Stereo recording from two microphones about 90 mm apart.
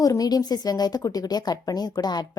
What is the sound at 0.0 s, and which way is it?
Speech, 45° left (ahead or behind).